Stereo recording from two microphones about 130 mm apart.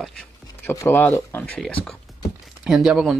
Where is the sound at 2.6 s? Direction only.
5° right (ahead or behind).